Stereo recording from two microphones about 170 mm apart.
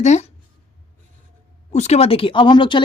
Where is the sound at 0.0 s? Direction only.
40° left (ahead or behind).